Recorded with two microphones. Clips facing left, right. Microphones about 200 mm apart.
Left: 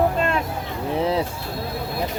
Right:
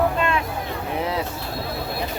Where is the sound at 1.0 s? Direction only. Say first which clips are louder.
Left 5 dB; 30° left (ahead or behind).